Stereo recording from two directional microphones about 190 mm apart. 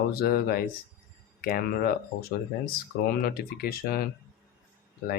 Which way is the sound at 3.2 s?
55° left (ahead or behind).